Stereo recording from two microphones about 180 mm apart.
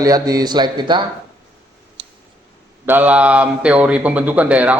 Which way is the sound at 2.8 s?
10° right (ahead or behind).